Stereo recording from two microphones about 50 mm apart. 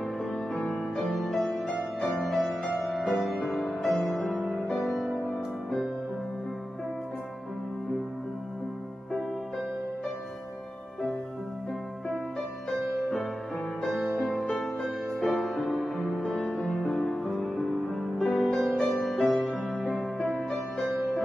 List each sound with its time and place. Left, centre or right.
0.7 s music: centre
12.4 s music: centre
15.2 s music: centre
15.5 s music: centre
20.8 s music: centre